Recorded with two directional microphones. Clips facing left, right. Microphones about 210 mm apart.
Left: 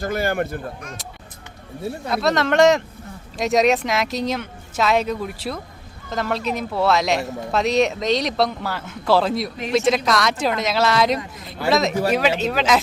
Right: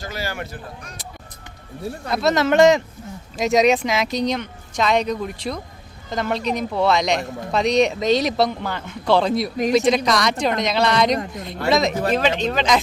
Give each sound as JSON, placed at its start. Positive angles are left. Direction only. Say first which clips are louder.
{"t": 0.0, "sound": "speech", "louder": "left 7 dB", "side_deg": 55}
{"t": 1.8, "sound": "speech", "louder": "even", "side_deg": 0}